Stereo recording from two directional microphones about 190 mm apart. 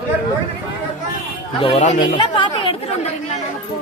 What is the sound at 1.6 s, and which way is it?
Speech, 35° left (ahead or behind).